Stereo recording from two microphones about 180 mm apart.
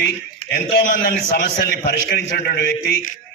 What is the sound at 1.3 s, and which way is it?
A man's voice, 60° left (ahead or behind).